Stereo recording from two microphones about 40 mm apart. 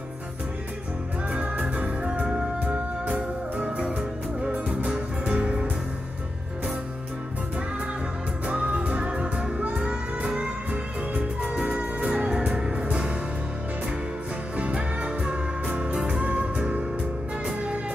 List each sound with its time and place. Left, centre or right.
1.3 s music: right
2.7 s music: right
8.5 s music: right
12.3 s music: centre
14.6 s music: right